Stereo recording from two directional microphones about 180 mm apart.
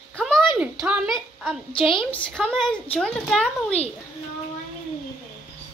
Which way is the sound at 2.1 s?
5° left (ahead or behind).